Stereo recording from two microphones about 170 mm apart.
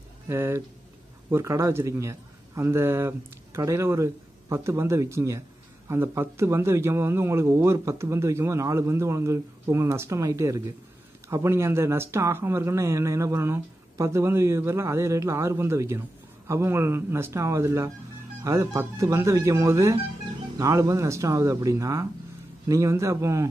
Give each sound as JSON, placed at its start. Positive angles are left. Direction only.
{"t": 0.3, "sound": "speech", "side_deg": -15}